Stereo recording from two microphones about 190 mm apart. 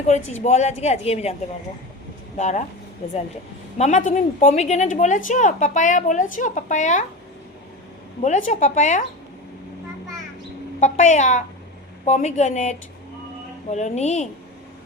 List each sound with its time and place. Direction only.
0.1 s a woman's voice: 35° left (ahead or behind)
2.4 s a woman's voice: 35° left (ahead or behind)
3.8 s a woman's voice: 40° left (ahead or behind)
8.2 s a woman's voice: 40° left (ahead or behind)
10.8 s a woman's voice: 40° left (ahead or behind)